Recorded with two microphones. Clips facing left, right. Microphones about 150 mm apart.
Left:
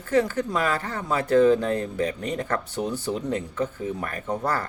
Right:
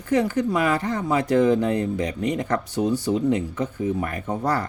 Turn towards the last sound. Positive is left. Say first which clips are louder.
# right 2 dB
turn(degrees=-15)  # may be behind; listen again after turning